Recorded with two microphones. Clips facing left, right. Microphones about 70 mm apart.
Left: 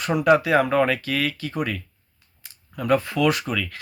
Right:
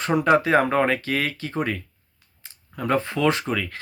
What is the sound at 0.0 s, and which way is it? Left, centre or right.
Speech, right.